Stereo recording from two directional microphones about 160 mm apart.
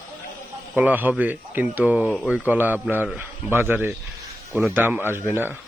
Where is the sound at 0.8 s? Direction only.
10° right (ahead or behind).